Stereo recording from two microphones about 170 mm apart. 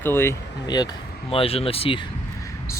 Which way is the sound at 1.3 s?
35° left (ahead or behind).